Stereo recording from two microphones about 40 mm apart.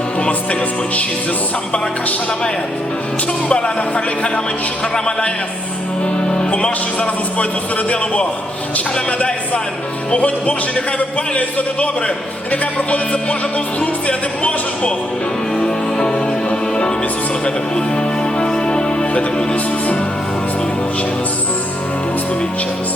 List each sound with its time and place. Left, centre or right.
3.5 s music: left
6.3 s music: left
13.7 s music: left
15.5 s music: centre